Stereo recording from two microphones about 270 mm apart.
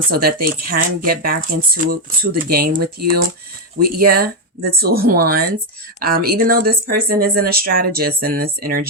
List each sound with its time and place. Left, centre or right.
0.1 s speech: right